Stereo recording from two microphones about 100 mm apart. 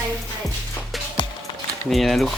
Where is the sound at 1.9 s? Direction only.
Centre (ahead or behind).